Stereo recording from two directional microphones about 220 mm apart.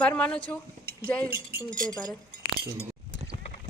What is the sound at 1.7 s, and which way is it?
Speech, 5° left (ahead or behind).